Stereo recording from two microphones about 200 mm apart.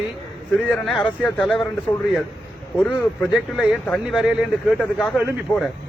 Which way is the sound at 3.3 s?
Centre (ahead or behind).